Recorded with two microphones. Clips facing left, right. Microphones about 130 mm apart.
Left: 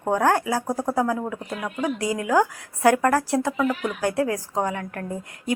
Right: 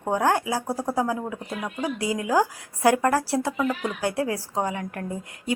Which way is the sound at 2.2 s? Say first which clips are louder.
Left 2 dB; 25° right (ahead or behind).